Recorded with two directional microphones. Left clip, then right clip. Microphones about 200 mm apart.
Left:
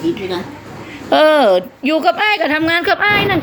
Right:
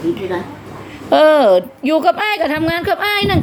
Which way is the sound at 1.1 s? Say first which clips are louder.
Right 1 dB; 5° right (ahead or behind).